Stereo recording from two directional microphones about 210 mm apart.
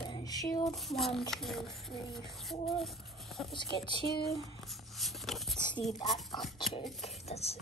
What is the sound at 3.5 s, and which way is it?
Speech, 20° left (ahead or behind).